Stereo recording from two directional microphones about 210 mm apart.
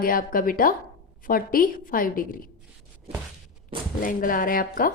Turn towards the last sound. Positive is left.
turn(degrees=40)  # may be behind; listen again after turning